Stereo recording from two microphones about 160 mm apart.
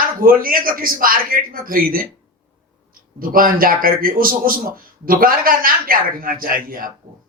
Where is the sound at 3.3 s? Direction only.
60° right (ahead or behind).